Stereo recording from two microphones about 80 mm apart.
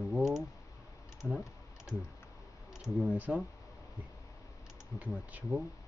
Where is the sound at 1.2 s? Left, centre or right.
Centre.